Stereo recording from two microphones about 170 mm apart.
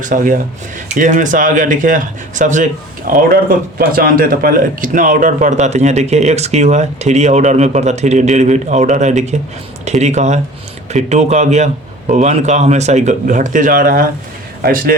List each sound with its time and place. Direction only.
0.0 s a man's voice: 50° right (ahead or behind)